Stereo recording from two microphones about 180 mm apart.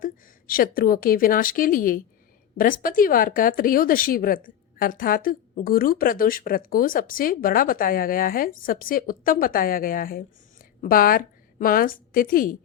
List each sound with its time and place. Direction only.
0.0 s a woman's voice: 55° left (ahead or behind)